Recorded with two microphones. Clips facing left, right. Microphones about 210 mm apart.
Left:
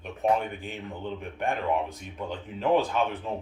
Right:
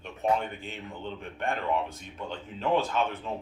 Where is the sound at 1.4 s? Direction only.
15° left (ahead or behind).